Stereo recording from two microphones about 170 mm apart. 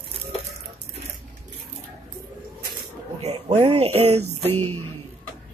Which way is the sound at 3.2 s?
40° right (ahead or behind).